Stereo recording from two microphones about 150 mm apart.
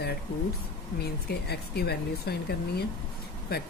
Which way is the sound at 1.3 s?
90° left.